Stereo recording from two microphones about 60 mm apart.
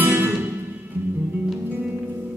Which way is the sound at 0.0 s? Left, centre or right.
Right.